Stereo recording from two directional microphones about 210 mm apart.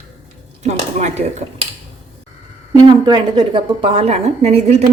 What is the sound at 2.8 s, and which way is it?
A woman's voice, 20° right (ahead or behind).